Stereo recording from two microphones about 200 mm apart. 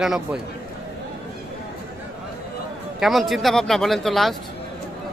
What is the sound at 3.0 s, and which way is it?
Speech, centre (ahead or behind).